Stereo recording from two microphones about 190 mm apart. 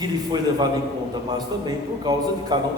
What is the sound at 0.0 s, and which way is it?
A man's voice, 20° right (ahead or behind).